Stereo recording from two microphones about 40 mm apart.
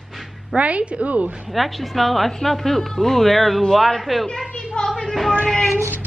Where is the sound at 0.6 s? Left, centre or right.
Right.